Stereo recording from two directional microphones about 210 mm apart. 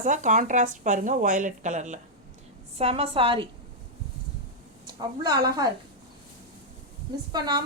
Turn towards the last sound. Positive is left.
turn(degrees=-20)  # may be behind; listen again after turning